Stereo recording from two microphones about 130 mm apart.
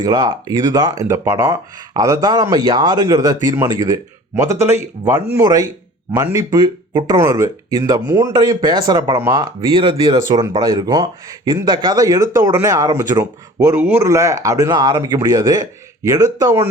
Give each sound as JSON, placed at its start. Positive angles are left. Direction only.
{"t": 0.0, "sound": "speech", "side_deg": -30}
{"t": 6.1, "sound": "speech", "side_deg": -25}